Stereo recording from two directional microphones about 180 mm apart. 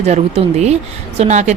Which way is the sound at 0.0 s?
35° right (ahead or behind).